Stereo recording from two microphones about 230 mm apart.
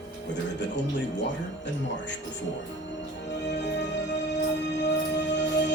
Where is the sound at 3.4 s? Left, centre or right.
Left.